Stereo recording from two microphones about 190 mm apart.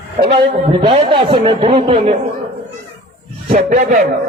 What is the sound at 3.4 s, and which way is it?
Speech, 45° right (ahead or behind).